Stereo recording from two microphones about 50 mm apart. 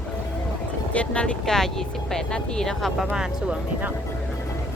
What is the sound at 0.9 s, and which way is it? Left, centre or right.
Speech, left.